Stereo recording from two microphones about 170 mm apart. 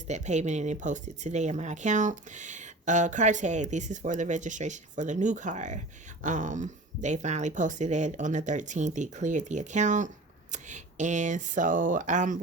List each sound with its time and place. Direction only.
0.1 s speech: 45° right (ahead or behind)